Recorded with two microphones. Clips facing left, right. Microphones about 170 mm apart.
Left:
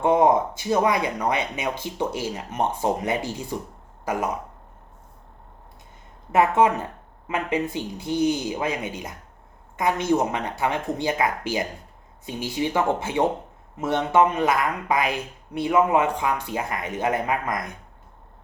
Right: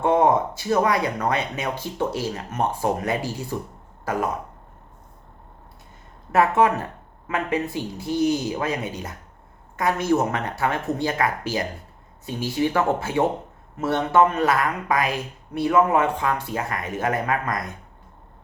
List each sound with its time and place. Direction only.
0.0 s speech: 15° left (ahead or behind)
6.3 s speech: 20° left (ahead or behind)